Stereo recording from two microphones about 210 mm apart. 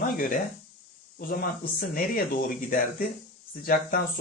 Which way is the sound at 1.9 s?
40° left (ahead or behind).